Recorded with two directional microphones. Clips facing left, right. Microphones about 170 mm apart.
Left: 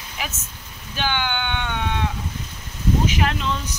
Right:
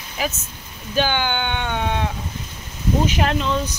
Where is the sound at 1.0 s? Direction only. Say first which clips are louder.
Right 4 dB; 35° right (ahead or behind).